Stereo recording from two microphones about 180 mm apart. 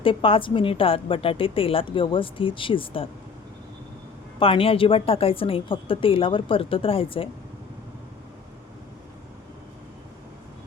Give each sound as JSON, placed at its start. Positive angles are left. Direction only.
{"t": 0.0, "sound": "a woman's voice", "side_deg": 30}
{"t": 4.4, "sound": "a woman's voice", "side_deg": 30}